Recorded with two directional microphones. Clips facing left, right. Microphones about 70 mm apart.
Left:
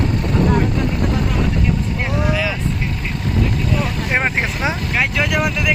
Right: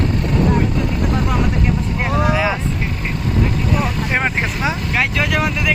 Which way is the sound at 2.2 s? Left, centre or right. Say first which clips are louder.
Right 3 dB; right.